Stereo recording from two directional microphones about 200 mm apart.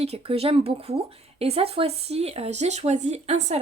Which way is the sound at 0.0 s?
30° right (ahead or behind).